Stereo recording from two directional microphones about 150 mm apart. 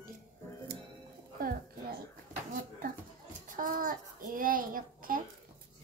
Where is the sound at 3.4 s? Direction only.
65° right (ahead or behind).